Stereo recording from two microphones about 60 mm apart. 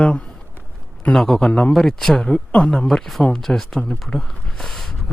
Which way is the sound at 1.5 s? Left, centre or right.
Centre.